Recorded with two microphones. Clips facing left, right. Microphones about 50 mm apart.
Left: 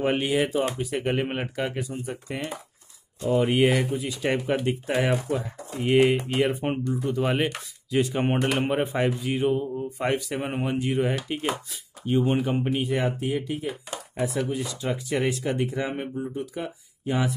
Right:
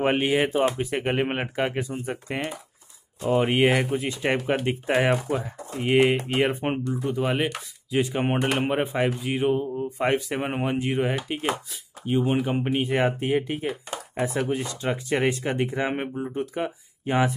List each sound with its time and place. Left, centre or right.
0.0 s speech: right
3.9 s speech: right
4.9 s speech: centre
7.2 s speech: centre
7.9 s speech: centre
12.6 s speech: right